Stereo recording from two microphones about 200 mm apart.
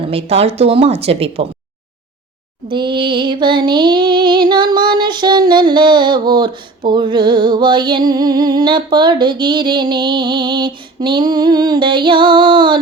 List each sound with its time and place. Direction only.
0.1 s music: 30° right (ahead or behind)
2.6 s music: 25° right (ahead or behind)